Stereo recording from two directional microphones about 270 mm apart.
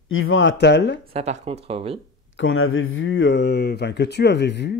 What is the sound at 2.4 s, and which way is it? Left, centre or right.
Speech, left.